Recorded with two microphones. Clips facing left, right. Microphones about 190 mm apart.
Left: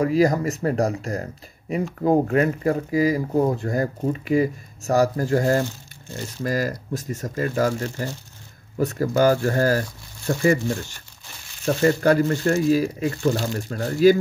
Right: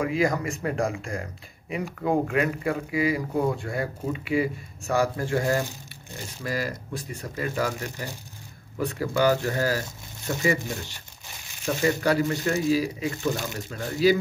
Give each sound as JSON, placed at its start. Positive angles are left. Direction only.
{"t": 0.0, "sound": "speech", "side_deg": 40}
{"t": 7.8, "sound": "speech", "side_deg": -15}
{"t": 8.7, "sound": "speech", "side_deg": 40}